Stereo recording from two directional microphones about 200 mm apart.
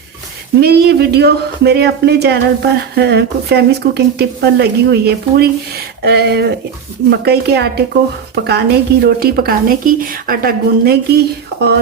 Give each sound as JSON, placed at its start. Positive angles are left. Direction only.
{"t": 0.6, "sound": "speech", "side_deg": -55}